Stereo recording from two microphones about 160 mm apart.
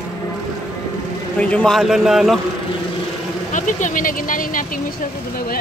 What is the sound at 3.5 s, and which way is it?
Speech, 55° left (ahead or behind).